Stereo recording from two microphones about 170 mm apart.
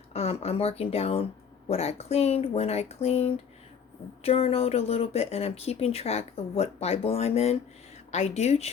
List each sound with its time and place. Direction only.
0.1 s speech: 35° left (ahead or behind)